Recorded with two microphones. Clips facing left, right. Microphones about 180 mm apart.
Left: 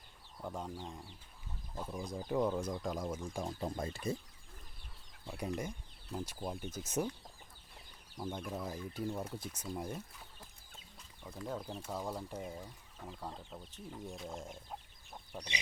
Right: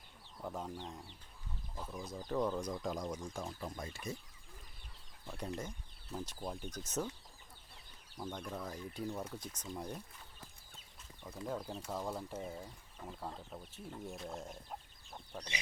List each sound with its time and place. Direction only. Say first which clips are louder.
0.4 s speech: even; centre (ahead or behind)
3.4 s speech: left 5 dB; 25° left (ahead or behind)
5.2 s speech: left 3 dB; 10° left (ahead or behind)
8.2 s speech: left 2 dB; 10° left (ahead or behind)
11.3 s speech: even; 5° right (ahead or behind)
15.3 s speech: left 1 dB; 15° left (ahead or behind)